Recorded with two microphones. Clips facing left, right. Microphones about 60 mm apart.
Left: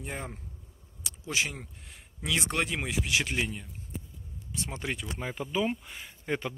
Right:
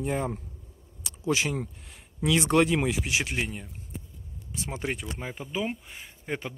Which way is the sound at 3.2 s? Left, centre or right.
Centre.